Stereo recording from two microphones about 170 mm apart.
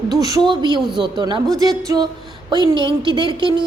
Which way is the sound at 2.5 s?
25° right (ahead or behind).